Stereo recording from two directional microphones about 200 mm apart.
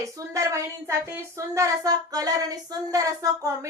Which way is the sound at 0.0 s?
15° right (ahead or behind).